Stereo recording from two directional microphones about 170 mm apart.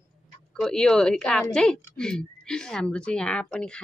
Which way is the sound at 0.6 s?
5° left (ahead or behind).